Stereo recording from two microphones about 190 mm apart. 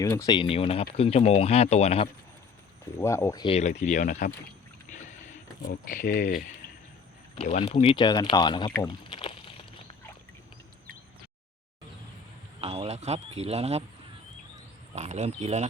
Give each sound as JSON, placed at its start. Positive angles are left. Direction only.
{"t": 0.0, "sound": "speech", "side_deg": 15}
{"t": 3.0, "sound": "speech", "side_deg": 15}
{"t": 3.4, "sound": "speech", "side_deg": 35}
{"t": 4.9, "sound": "boat", "side_deg": 40}
{"t": 5.9, "sound": "speech", "side_deg": 45}
{"t": 7.3, "sound": "speech", "side_deg": 35}
{"t": 9.0, "sound": "a sound", "side_deg": 30}
{"t": 12.5, "sound": "speech", "side_deg": -35}
{"t": 14.9, "sound": "speech", "side_deg": -40}